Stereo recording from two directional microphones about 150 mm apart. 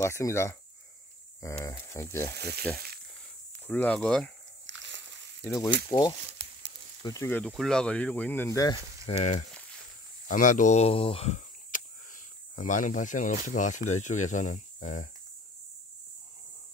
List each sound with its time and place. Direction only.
0.0 s speech: 20° left (ahead or behind)
1.6 s speech: 20° left (ahead or behind)
2.3 s speech: 90° right
3.6 s speech: 10° left (ahead or behind)
5.9 s speech: 30° left (ahead or behind)
7.2 s speech: 10° left (ahead or behind)
8.5 s speech: 25° left (ahead or behind)
9.0 s frying: 50° left (ahead or behind)
10.2 s speech: 60° left (ahead or behind)